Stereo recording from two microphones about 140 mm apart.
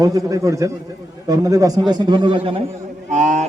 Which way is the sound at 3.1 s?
60° right (ahead or behind).